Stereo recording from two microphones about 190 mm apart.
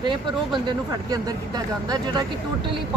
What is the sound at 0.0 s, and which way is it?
Speech, 25° right (ahead or behind).